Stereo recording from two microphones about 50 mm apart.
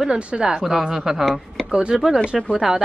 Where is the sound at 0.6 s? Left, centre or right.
Centre.